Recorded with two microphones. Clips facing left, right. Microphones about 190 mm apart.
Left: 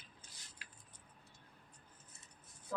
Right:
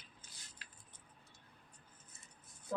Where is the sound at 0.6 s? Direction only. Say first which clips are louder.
Left 2 dB; 15° left (ahead or behind).